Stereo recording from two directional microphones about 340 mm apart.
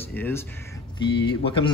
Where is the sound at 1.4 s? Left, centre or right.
Centre.